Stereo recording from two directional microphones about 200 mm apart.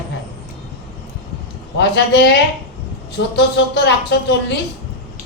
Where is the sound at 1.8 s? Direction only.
60° left (ahead or behind).